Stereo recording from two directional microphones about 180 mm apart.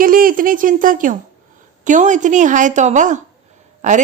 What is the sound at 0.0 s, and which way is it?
A woman's voice, 50° right (ahead or behind).